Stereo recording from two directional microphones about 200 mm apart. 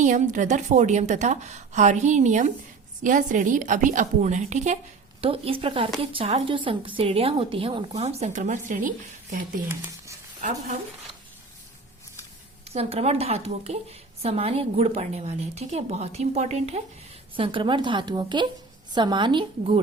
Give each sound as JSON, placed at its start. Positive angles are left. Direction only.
{"t": 0.0, "sound": "a woman's voice", "side_deg": -40}
{"t": 9.6, "sound": "speech", "side_deg": -10}
{"t": 12.6, "sound": "a woman's voice", "side_deg": -30}